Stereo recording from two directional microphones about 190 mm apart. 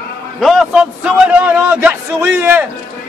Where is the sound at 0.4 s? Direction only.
Centre (ahead or behind).